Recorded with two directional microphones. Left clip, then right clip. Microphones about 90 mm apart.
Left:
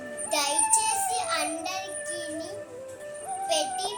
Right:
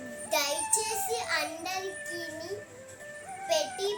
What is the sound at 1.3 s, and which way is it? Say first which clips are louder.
Child singing: left 3 dB; 40° right (ahead or behind).